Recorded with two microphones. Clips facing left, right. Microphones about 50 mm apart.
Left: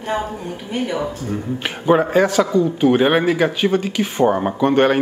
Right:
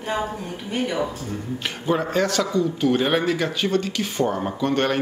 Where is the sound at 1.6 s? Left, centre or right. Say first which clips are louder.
Left 8 dB; left.